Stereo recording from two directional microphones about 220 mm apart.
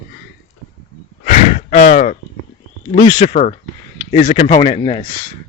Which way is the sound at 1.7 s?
40° left (ahead or behind).